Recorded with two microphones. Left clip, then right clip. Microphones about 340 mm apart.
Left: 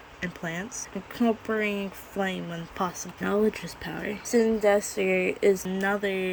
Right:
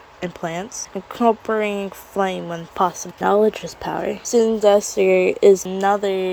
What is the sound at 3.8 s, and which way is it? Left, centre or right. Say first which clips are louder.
Speech: right 12 dB; right.